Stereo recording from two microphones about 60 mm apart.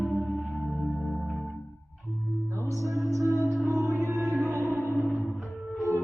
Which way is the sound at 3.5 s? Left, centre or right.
Centre.